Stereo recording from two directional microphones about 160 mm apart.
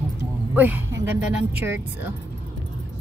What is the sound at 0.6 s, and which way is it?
Speech, 10° right (ahead or behind).